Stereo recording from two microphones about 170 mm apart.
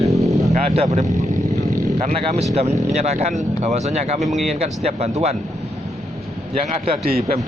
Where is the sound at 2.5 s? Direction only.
40° right (ahead or behind).